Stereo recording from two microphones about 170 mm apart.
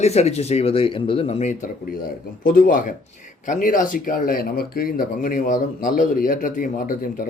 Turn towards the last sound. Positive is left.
turn(degrees=55)  # may be behind; listen again after turning